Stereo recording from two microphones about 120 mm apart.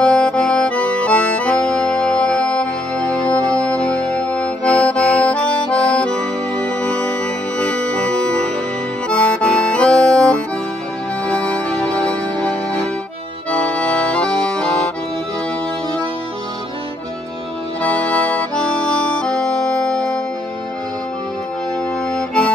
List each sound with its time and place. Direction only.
0.0 s accordion: 10° left (ahead or behind)
11.2 s music: 10° left (ahead or behind)
13.7 s accordion: 10° left (ahead or behind)
17.8 s accordion: 10° left (ahead or behind)
22.1 s accordion: 5° left (ahead or behind)